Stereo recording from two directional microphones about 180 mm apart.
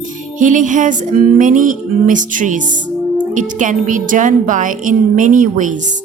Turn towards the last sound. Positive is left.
turn(degrees=-45)  # may be behind; listen again after turning